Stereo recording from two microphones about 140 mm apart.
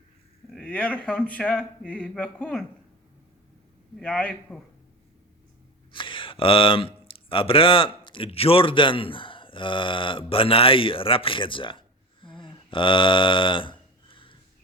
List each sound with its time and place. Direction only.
0.5 s speech: 10° left (ahead or behind)
3.9 s speech: 10° left (ahead or behind)
5.9 s speech: 35° left (ahead or behind)
12.2 s a sound: 35° left (ahead or behind)